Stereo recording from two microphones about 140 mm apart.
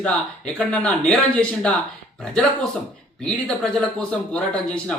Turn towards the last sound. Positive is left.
turn(degrees=10)  # may be behind; listen again after turning